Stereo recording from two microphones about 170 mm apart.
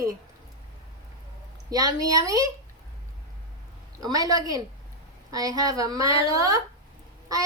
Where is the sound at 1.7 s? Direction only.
20° right (ahead or behind).